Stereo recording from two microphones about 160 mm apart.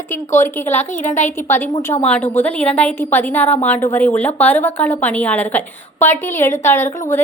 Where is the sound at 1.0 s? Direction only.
45° left (ahead or behind).